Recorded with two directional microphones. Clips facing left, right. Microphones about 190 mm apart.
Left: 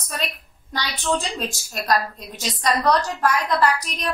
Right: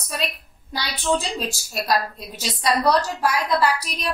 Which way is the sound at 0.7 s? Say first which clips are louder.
Right 1 dB; 5° right (ahead or behind).